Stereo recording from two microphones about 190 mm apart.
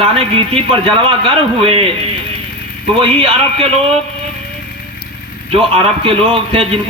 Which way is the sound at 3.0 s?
30° right (ahead or behind).